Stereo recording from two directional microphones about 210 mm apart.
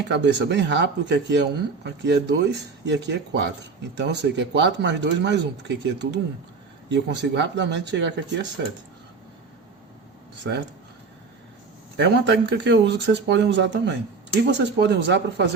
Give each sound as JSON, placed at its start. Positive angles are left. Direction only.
{"t": 0.1, "sound": "speech", "side_deg": -55}
{"t": 11.9, "sound": "speech", "side_deg": -55}